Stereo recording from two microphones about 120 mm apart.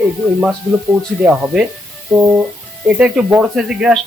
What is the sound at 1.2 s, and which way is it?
Speech, 5° right (ahead or behind).